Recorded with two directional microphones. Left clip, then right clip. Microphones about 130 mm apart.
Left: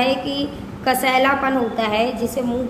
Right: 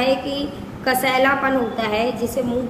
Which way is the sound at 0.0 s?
35° left (ahead or behind).